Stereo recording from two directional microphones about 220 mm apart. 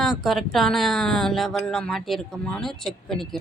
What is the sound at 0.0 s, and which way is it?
Speech, centre (ahead or behind).